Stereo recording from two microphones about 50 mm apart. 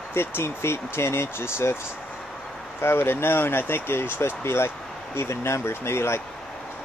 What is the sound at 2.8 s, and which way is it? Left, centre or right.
Speech, left.